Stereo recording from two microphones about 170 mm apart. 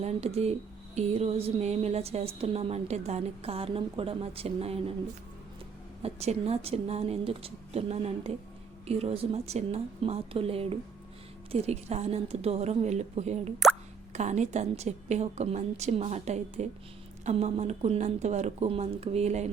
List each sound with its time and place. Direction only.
0.0 s a woman's voice: 40° right (ahead or behind)
6.0 s a woman's voice: 40° right (ahead or behind)